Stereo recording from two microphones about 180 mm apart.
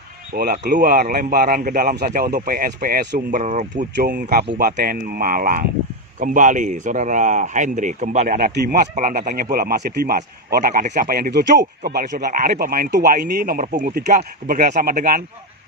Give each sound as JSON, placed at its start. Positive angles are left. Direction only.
{"t": 0.3, "sound": "speech", "side_deg": -60}